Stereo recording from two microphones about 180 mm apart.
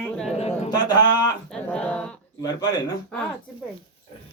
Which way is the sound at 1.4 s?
5° left (ahead or behind).